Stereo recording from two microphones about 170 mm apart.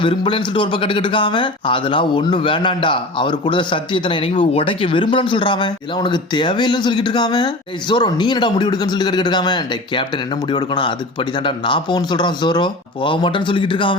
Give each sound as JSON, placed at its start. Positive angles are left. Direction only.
{"t": 0.0, "sound": "speech", "side_deg": 30}